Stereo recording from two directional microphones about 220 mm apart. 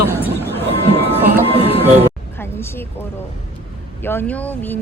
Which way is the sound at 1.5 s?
25° left (ahead or behind).